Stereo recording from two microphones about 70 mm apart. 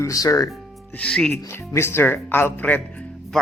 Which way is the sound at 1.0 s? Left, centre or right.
Centre.